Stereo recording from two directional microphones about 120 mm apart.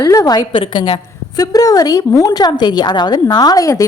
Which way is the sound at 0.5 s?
45° left (ahead or behind).